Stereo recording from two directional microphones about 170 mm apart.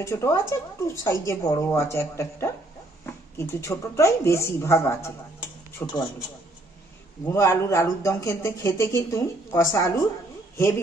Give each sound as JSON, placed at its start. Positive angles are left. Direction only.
{"t": 0.0, "sound": "speech", "side_deg": 15}
{"t": 7.2, "sound": "speech", "side_deg": 15}